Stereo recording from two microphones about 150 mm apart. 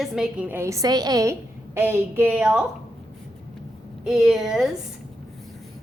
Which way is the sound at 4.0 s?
5° right (ahead or behind).